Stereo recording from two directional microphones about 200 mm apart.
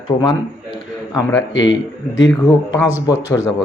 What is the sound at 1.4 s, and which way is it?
Speech, 65° left (ahead or behind).